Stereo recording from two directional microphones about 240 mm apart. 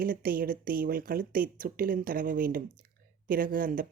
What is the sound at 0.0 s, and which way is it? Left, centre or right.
Speech, right.